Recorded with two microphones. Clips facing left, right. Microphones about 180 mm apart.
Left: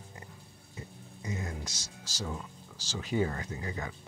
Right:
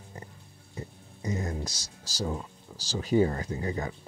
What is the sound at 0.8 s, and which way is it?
Speech, 35° right (ahead or behind).